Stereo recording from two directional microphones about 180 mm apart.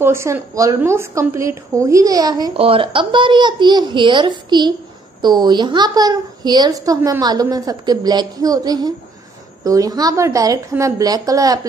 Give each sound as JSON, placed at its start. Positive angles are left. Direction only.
{"t": 0.0, "sound": "a woman's voice", "side_deg": -15}